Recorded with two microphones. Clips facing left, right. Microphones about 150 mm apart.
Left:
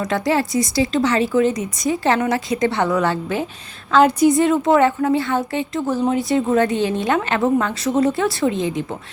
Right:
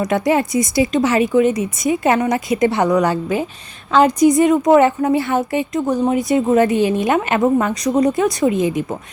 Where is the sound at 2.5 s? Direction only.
20° right (ahead or behind).